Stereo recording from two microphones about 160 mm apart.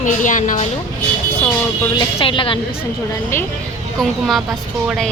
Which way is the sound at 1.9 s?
30° left (ahead or behind).